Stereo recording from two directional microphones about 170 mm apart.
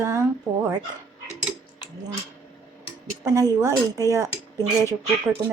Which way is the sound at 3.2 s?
20° right (ahead or behind).